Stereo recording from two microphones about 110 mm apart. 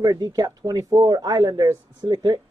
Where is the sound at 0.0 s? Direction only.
35° right (ahead or behind).